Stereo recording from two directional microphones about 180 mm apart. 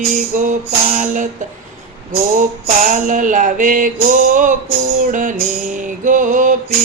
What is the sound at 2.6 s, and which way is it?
Music, 45° right (ahead or behind).